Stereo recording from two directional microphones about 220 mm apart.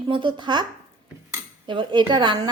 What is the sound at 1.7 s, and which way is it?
Speech, 20° right (ahead or behind).